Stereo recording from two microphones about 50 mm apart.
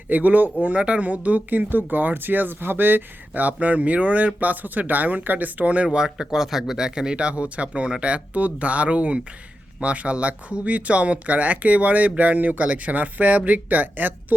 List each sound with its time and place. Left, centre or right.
0.1 s speech: right
6.3 s speech: centre; by 14.3 s right